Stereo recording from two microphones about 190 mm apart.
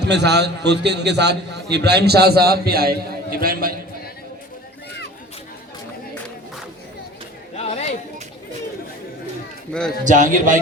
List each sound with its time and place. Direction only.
0.0 s a man's voice: 60° right (ahead or behind)
7.5 s a sound: 35° left (ahead or behind)
10.0 s a man's voice: 40° right (ahead or behind)